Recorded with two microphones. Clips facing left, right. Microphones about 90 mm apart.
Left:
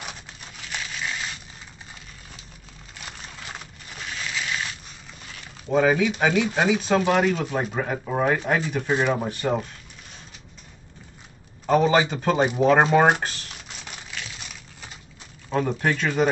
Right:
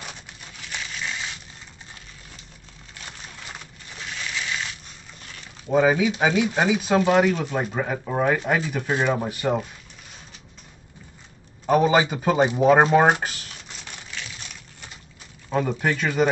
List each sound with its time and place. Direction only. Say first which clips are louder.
0.6 s crumpling: left 1 dB; centre (ahead or behind)
3.0 s a sound: left 1 dB; 5° left (ahead or behind)
5.7 s speech: right 1 dB; 10° right (ahead or behind)
11.6 s speech: right 1 dB; 10° right (ahead or behind)
13.8 s a sound: even; centre (ahead or behind)
15.5 s speech: even; centre (ahead or behind)